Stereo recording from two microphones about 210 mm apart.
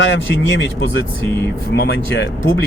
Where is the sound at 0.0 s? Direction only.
60° left (ahead or behind).